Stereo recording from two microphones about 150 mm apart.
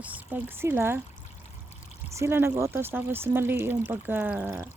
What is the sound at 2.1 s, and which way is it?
Speech, 15° right (ahead or behind).